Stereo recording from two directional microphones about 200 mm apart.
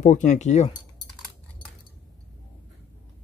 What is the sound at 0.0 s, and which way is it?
Speech, 40° left (ahead or behind).